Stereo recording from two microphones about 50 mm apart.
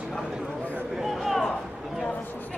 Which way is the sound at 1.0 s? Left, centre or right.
Centre.